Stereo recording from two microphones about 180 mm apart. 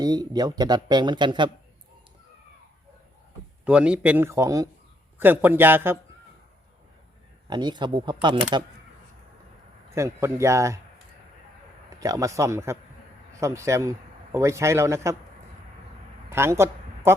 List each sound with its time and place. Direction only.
0.0 s speech: 20° right (ahead or behind)
3.6 s a man's voice: 5° right (ahead or behind)
7.5 s speech: 25° right (ahead or behind)
9.9 s a man's voice: 15° right (ahead or behind)
11.9 s a man's voice: 20° right (ahead or behind)
16.3 s a woman's voice: 15° right (ahead or behind)